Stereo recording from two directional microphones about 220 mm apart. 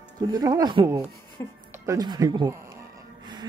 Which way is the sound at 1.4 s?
10° left (ahead or behind).